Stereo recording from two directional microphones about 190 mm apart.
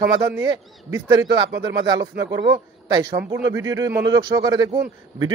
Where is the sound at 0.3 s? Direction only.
15° right (ahead or behind).